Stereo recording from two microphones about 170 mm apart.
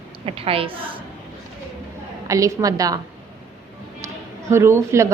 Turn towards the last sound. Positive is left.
turn(degrees=-15)  # may be behind; listen again after turning